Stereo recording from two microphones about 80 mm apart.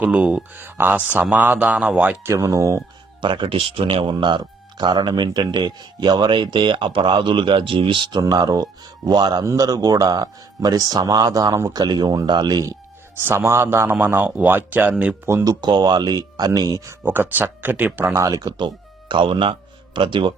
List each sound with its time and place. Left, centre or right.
0.0 s speech: centre
2.2 s speech: right
3.2 s speech: right
13.1 s a man's voice: right
15.4 s speech: right
17.0 s speech: right
18.1 s speech: right
18.5 s speech: right